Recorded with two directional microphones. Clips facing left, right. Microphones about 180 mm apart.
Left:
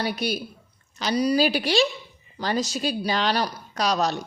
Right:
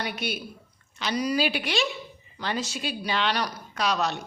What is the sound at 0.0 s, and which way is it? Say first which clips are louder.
A woman's voice: left 5 dB; 35° left (ahead or behind).